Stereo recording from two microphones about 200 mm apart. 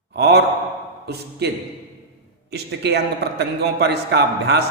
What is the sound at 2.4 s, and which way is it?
A man's voice, 55° right (ahead or behind).